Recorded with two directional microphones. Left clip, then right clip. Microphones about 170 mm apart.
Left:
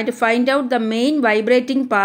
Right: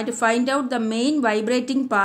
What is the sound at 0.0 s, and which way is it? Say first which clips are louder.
A woman's voice: left 4 dB; 15° left (ahead or behind).